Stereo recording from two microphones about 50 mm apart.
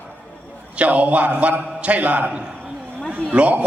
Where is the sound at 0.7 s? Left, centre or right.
Right.